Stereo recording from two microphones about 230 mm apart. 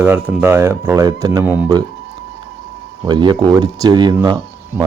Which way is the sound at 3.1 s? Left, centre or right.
Centre.